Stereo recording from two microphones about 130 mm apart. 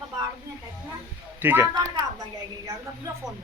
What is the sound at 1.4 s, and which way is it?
Speech, 15° right (ahead or behind).